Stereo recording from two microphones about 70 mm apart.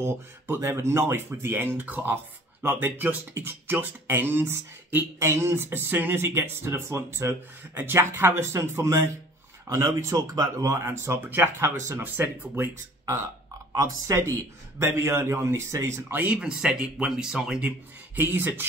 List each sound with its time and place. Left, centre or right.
0.0 s speech: right
10.8 s speech: right
13.7 s speech: right
16.1 s speech: right
16.3 s speech: centre
17.6 s speech: right